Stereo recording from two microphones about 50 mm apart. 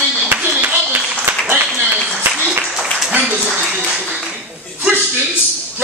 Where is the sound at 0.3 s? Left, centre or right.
Right.